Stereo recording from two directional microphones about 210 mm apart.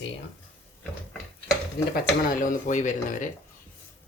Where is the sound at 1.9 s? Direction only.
40° left (ahead or behind).